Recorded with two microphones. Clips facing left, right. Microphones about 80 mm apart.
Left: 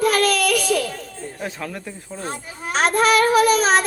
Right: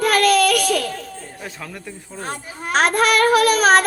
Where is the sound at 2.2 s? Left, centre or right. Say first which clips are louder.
Right 2 dB; right.